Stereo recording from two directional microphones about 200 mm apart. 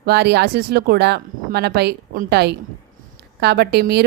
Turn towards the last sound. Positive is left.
turn(degrees=-55)  # may be behind; listen again after turning